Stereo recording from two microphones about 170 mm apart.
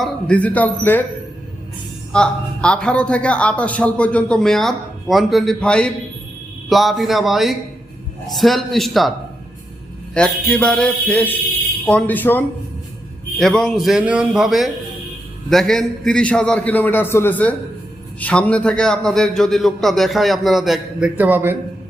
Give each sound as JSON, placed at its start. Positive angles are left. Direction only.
{"t": 0.0, "sound": "a man's voice", "side_deg": 5}
{"t": 2.1, "sound": "a man's voice", "side_deg": 5}
{"t": 10.2, "sound": "a man's voice", "side_deg": 5}